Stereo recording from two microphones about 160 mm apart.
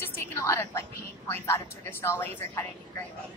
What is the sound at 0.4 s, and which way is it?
A woman's voice, 15° left (ahead or behind).